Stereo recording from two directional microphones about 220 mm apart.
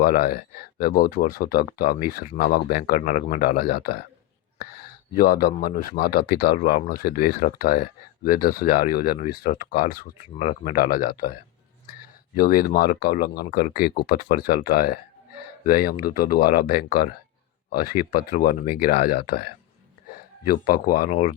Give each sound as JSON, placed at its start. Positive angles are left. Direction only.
{"t": 0.0, "sound": "speech", "side_deg": 40}
{"t": 12.4, "sound": "speech", "side_deg": 40}